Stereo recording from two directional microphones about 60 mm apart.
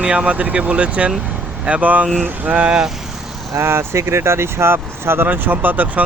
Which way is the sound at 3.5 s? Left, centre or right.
Right.